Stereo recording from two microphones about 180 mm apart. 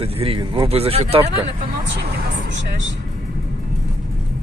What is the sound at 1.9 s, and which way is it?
Speech, 80° right.